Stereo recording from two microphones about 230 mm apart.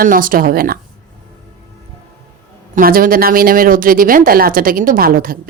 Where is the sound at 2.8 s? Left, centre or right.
Right.